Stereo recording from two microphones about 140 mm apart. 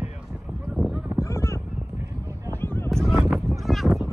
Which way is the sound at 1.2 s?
20° left (ahead or behind).